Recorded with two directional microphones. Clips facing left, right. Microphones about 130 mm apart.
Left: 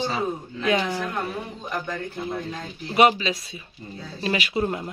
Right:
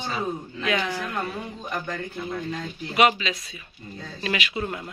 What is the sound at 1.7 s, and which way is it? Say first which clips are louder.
Speech: left 1 dB; 5° left (ahead or behind).